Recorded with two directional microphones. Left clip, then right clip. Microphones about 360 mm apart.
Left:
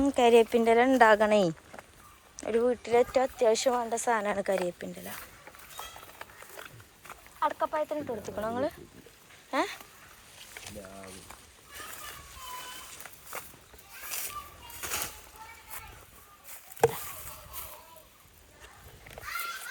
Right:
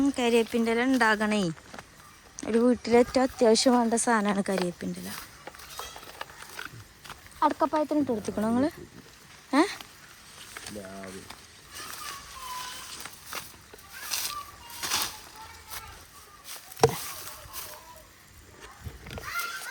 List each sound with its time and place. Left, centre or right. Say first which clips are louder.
0.0 s speech: left 3 dB; centre
5.8 s run: right 3 dB; centre
7.1 s speech: right 4 dB; centre
14.1 s a sound: right 6 dB; centre